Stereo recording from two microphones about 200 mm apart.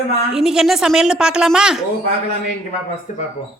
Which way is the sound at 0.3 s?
Centre (ahead or behind).